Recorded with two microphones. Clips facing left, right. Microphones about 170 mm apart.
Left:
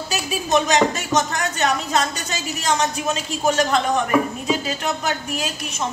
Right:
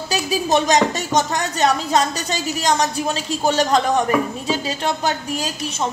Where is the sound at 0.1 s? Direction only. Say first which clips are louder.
Right 2 dB; 35° right (ahead or behind).